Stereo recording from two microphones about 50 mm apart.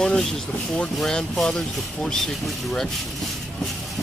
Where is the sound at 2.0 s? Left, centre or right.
Centre.